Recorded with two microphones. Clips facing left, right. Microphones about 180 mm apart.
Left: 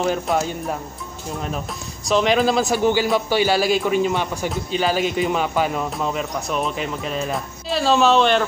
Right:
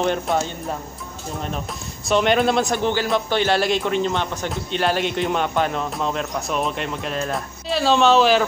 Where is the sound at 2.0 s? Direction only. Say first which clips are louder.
Even; centre (ahead or behind).